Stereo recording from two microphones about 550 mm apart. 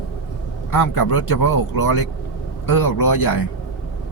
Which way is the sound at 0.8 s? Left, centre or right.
Left.